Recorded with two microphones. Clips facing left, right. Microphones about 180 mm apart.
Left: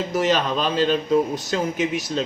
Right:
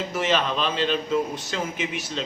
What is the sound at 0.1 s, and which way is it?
Speech, 40° left (ahead or behind).